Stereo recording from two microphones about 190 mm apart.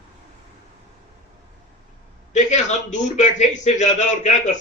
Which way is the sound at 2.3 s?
40° left (ahead or behind).